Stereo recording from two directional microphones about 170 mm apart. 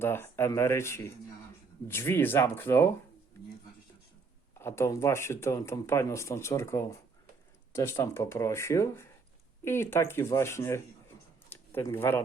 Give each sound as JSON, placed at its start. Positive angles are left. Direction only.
{"t": 0.0, "sound": "speech", "side_deg": 15}
{"t": 4.5, "sound": "speech", "side_deg": 15}
{"t": 11.4, "sound": "a sound", "side_deg": 15}